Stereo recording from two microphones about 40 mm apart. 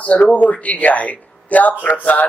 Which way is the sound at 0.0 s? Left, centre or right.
Left.